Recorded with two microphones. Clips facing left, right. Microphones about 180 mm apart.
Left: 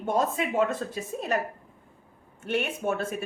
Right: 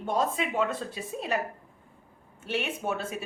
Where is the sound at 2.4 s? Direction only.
55° left (ahead or behind).